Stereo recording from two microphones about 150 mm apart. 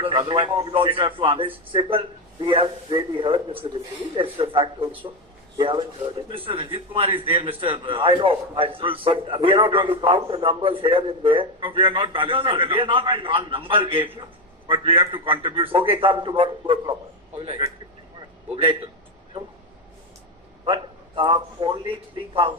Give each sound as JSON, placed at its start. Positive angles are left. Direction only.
{"t": 0.0, "sound": "a man's voice", "side_deg": -35}
{"t": 20.7, "sound": "a man's voice", "side_deg": -35}